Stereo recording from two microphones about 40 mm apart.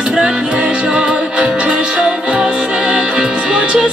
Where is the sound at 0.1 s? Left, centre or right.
Right.